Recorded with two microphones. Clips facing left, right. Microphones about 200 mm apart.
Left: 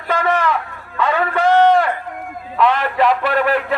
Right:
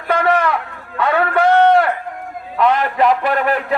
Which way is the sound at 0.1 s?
60° right (ahead or behind).